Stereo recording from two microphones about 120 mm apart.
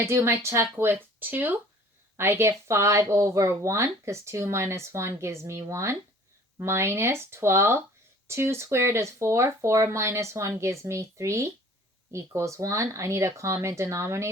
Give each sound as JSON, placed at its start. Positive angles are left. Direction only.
{"t": 0.0, "sound": "speech", "side_deg": -20}